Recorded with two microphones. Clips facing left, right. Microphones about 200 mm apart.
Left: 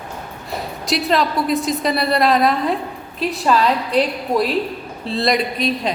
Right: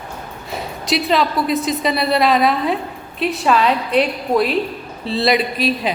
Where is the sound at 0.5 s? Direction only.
Centre (ahead or behind).